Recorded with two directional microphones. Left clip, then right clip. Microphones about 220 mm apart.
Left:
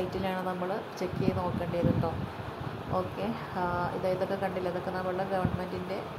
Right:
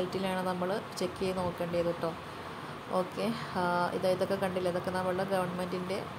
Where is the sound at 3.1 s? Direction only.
5° right (ahead or behind).